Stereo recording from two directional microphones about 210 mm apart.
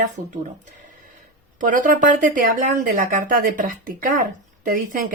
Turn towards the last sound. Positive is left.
turn(degrees=-40)  # may be behind; listen again after turning